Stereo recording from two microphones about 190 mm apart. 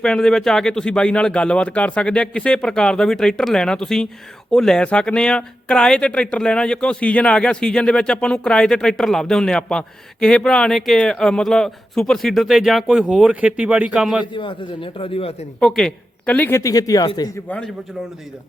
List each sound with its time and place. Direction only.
0.0 s speech: 5° left (ahead or behind)
14.3 s speech: 25° left (ahead or behind)
15.6 s speech: 5° left (ahead or behind); by 17.2 s 20° left (ahead or behind)